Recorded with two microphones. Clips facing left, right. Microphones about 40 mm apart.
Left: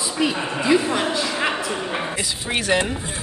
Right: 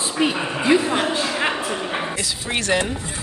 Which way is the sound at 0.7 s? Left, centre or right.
Right.